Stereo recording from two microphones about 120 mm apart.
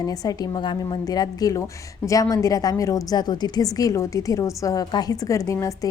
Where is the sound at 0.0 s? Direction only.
30° left (ahead or behind).